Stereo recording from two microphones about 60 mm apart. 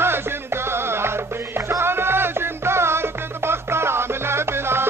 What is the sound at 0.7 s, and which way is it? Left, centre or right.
Music, right.